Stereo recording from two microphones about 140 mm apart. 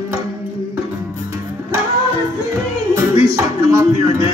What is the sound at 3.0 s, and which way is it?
Music, 20° right (ahead or behind).